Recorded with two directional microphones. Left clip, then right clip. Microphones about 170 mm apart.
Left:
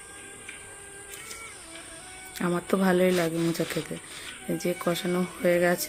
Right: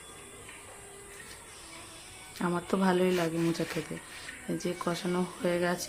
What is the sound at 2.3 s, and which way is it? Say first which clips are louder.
Speech: left 4 dB; 10° left (ahead or behind).